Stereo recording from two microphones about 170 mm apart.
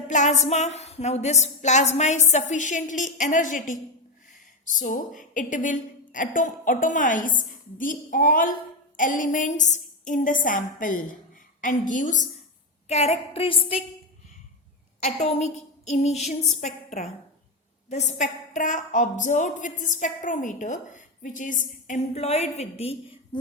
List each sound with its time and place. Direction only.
0.1 s a woman's voice: 45° left (ahead or behind)
12.9 s a woman's voice: 35° left (ahead or behind)
15.0 s a woman's voice: 40° left (ahead or behind)